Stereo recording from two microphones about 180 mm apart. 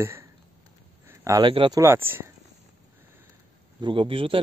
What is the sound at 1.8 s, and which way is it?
Speech, 15° right (ahead or behind).